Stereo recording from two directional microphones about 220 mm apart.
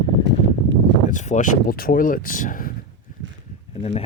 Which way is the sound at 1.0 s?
35° left (ahead or behind).